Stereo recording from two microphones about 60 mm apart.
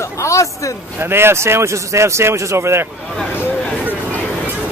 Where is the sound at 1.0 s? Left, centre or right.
Right.